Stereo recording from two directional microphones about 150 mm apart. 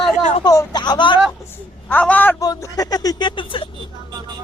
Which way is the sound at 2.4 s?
25° left (ahead or behind).